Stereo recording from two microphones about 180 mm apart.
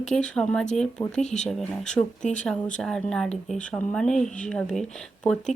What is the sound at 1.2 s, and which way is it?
Speech, 40° left (ahead or behind).